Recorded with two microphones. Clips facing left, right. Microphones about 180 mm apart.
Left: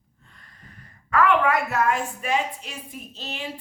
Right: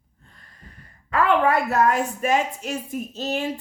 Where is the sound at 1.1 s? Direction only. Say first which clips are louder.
Right 1 dB; 30° right (ahead or behind).